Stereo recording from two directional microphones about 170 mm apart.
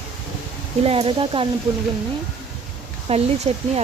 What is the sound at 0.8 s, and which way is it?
Speech, 35° right (ahead or behind).